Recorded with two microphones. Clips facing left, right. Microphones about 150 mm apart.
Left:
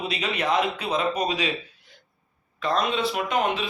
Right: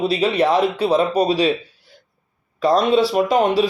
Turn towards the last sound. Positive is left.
turn(degrees=-35)  # may be behind; listen again after turning